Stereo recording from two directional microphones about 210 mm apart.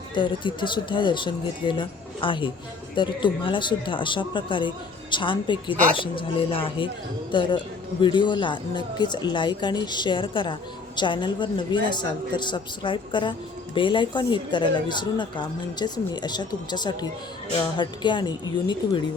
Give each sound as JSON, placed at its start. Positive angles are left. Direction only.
{"t": 0.1, "sound": "speech", "side_deg": 20}